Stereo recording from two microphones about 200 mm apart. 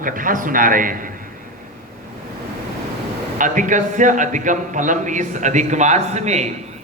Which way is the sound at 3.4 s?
40° right (ahead or behind).